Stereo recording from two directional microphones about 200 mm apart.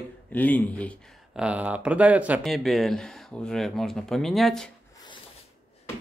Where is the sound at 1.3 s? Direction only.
5° right (ahead or behind).